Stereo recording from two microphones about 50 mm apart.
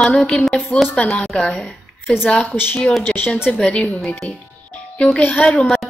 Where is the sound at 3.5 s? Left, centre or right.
Left.